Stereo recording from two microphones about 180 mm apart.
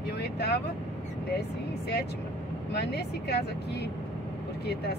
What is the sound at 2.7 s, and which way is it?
Speech, 65° left (ahead or behind).